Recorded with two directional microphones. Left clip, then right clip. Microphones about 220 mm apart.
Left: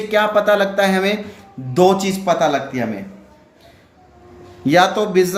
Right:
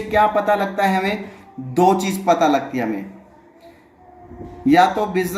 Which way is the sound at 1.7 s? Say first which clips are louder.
Left 2 dB; 45° left (ahead or behind).